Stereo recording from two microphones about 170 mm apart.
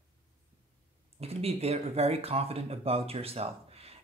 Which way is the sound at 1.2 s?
35° right (ahead or behind).